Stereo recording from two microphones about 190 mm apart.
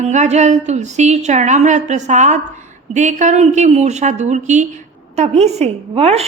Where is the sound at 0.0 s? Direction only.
35° right (ahead or behind).